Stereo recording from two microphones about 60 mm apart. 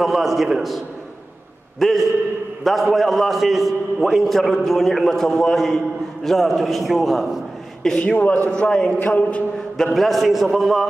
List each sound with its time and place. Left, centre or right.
0.0 s a man's voice: centre
8.1 s a man's voice: left
9.9 s a man's voice: centre